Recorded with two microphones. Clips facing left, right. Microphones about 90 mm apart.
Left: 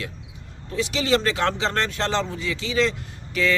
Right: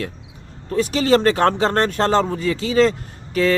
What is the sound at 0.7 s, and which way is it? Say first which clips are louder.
Speech: right 6 dB; 45° right (ahead or behind).